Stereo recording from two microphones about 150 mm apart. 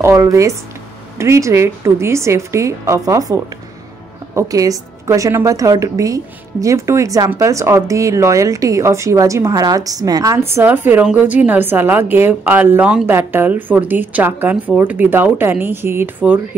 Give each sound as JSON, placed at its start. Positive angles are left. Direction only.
{"t": 0.0, "sound": "a woman's voice", "side_deg": -20}
{"t": 4.4, "sound": "a woman's voice", "side_deg": -25}